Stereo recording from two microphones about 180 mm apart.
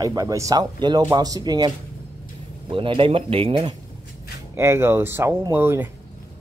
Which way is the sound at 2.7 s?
30° right (ahead or behind).